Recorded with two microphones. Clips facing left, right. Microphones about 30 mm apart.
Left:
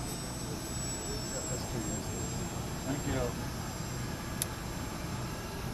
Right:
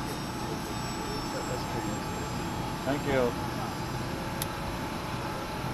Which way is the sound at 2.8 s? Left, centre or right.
Right.